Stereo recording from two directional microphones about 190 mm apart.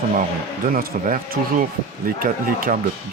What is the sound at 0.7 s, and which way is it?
Speech, 50° right (ahead or behind).